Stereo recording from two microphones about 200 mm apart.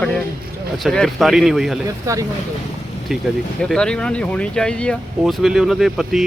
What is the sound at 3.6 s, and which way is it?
Speech, 5° left (ahead or behind).